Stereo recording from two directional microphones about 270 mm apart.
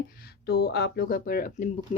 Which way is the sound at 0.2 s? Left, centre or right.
Left.